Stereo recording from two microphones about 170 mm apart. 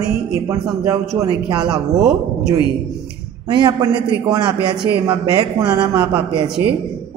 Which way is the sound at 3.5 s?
25° right (ahead or behind).